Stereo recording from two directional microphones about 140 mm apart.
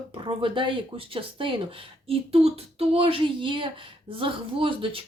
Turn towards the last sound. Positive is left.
turn(degrees=-40)  # may be behind; listen again after turning